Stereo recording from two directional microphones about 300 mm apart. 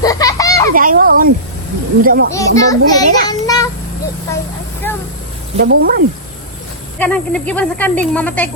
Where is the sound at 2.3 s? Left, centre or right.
Centre.